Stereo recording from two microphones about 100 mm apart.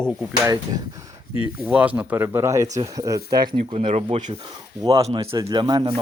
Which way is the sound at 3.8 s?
60° right (ahead or behind).